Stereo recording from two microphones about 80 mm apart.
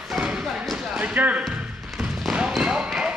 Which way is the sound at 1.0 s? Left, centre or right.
Centre.